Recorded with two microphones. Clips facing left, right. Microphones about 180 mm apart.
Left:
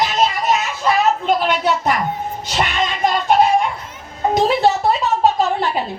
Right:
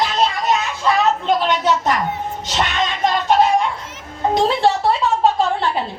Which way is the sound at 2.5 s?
15° left (ahead or behind).